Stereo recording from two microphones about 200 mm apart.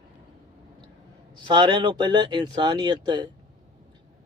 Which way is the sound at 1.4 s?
25° right (ahead or behind).